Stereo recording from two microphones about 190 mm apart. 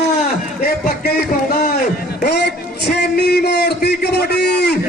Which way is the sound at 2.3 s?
60° left (ahead or behind).